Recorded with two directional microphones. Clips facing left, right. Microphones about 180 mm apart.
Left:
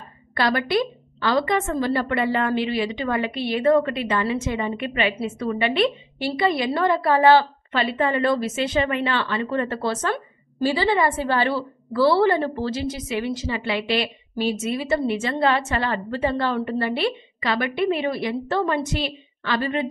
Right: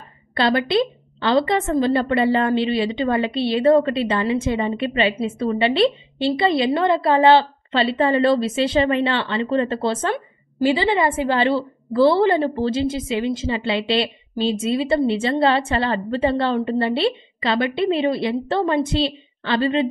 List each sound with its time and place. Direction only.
0.3 s a woman's voice: 25° right (ahead or behind)